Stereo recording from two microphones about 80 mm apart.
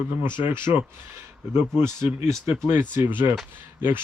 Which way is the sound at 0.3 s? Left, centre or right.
Right.